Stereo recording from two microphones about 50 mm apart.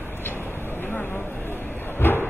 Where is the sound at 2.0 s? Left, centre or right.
Left.